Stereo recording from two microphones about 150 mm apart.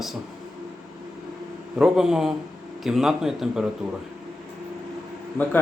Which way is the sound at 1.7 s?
5° right (ahead or behind).